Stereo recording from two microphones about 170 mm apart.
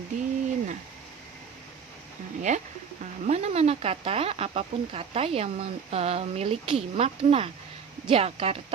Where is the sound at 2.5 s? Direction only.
45° right (ahead or behind).